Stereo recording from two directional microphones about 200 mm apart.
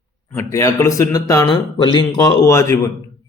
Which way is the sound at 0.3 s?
15° left (ahead or behind).